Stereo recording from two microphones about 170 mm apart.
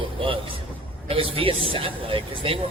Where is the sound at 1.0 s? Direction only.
35° right (ahead or behind).